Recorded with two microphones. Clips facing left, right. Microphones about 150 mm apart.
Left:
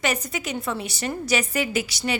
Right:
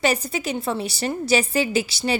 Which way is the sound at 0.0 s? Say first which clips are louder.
Right 4 dB; 30° right (ahead or behind).